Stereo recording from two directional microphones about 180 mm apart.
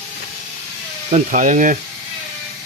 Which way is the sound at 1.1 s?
45° right (ahead or behind).